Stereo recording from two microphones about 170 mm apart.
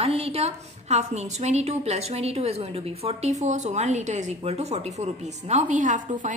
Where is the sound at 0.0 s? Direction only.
35° right (ahead or behind).